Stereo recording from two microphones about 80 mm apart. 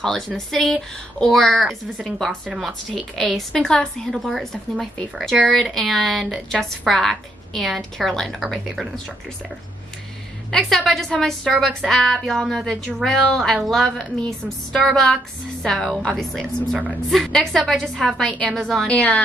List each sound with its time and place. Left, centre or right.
0.5 s a woman's voice: centre
10.5 s a woman's voice: centre
18.9 s a woman's voice: centre